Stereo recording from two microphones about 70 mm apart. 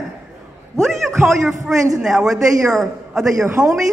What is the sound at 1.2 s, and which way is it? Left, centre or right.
A woman's voice, centre.